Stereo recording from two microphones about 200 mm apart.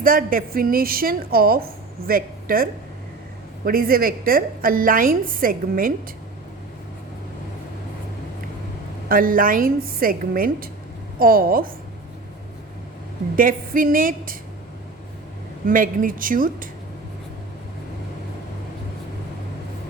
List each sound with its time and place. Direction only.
0.0 s a woman's voice: 45° right (ahead or behind)
9.0 s a woman's voice: 45° right (ahead or behind)
13.3 s a woman's voice: 45° right (ahead or behind)
15.6 s a woman's voice: 45° right (ahead or behind)